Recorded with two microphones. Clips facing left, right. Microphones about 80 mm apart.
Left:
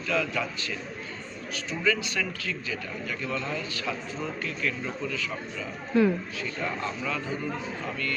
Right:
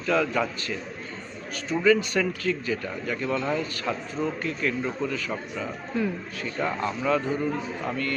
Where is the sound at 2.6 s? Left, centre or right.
Right.